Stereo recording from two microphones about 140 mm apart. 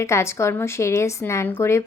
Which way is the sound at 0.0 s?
20° left (ahead or behind).